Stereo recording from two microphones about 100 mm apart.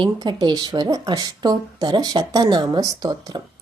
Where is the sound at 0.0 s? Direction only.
45° right (ahead or behind).